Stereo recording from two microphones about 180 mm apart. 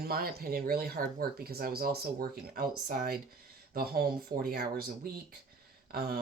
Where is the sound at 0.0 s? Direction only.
60° right (ahead or behind).